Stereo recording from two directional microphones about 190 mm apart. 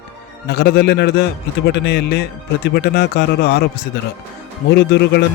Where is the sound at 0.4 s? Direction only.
55° left (ahead or behind).